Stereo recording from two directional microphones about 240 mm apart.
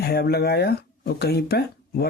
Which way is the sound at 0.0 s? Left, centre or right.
Left.